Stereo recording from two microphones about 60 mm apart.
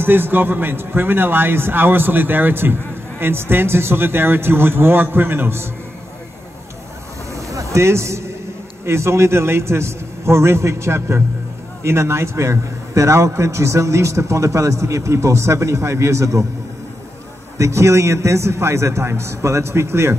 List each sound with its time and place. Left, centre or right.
0.0 s a man's voice: right
7.4 s music: right
8.8 s a man's voice: right
17.6 s a man's voice: right